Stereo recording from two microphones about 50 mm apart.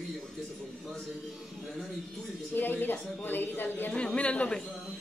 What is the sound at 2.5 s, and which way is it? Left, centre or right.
Speech, left.